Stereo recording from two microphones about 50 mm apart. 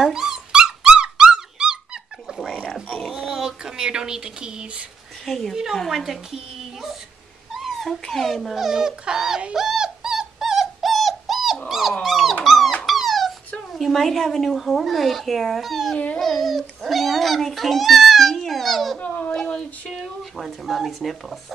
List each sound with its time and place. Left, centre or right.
0.0 s dog: centre
2.6 s a sound: centre
5.2 s a child's voice: centre
8.5 s speech: centre
9.4 s dog: centre
13.7 s a child's voice: centre
18.9 s a sound: left
19.9 s a child's voice: centre